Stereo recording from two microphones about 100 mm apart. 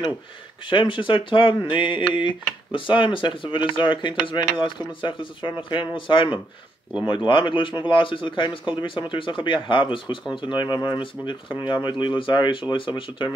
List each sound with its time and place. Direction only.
0.7 s speech: 55° left (ahead or behind)